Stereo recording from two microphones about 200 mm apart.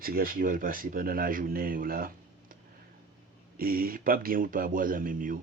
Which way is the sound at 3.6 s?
45° right (ahead or behind).